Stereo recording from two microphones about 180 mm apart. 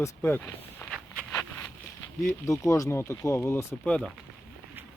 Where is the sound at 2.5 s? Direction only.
15° left (ahead or behind).